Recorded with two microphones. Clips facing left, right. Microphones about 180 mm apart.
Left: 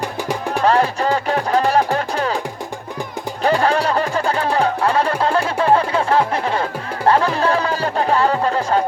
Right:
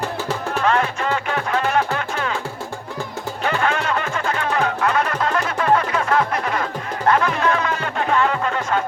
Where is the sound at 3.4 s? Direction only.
35° left (ahead or behind).